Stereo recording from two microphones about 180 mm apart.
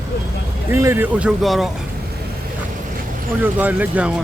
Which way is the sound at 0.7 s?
15° right (ahead or behind).